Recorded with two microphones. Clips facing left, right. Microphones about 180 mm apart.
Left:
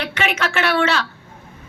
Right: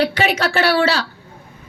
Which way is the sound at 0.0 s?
35° right (ahead or behind).